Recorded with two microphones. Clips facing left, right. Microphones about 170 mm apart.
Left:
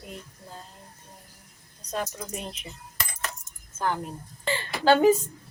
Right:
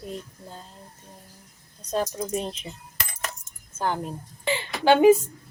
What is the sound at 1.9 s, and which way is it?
Speech, 30° right (ahead or behind).